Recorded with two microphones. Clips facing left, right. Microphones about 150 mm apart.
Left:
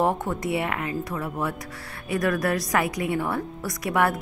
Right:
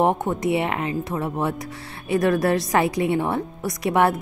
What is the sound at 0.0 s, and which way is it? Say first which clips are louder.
A woman's voice: right 4 dB; 20° right (ahead or behind).